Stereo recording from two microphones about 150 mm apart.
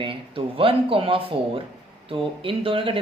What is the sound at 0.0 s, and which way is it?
A woman's voice, 35° right (ahead or behind).